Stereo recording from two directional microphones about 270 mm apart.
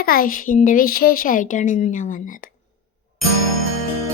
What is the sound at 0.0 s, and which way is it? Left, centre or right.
A woman's voice, left.